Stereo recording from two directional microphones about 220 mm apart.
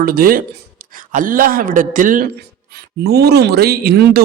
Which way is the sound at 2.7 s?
50° right (ahead or behind).